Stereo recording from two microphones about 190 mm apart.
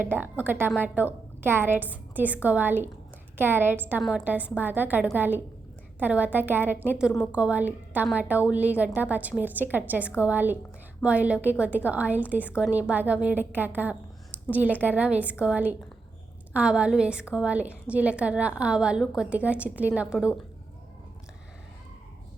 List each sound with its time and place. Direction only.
0.0 s a woman's voice: 10° right (ahead or behind)